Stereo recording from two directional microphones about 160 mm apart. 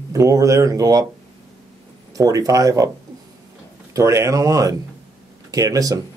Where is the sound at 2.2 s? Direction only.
20° right (ahead or behind).